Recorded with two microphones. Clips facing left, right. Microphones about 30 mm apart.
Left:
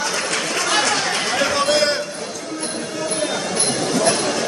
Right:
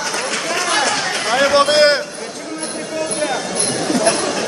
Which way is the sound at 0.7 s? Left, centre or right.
Centre.